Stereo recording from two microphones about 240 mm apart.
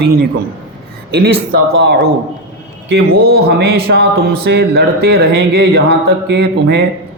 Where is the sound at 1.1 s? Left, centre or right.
Right.